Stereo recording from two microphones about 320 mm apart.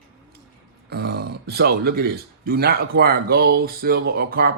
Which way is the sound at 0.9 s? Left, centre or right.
Right.